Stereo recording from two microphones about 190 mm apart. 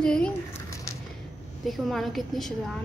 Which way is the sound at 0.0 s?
5° left (ahead or behind).